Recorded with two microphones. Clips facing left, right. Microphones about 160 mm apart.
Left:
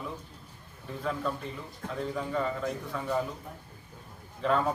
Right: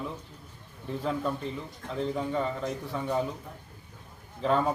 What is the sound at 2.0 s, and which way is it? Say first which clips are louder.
A man's voice: right 2 dB; 20° right (ahead or behind).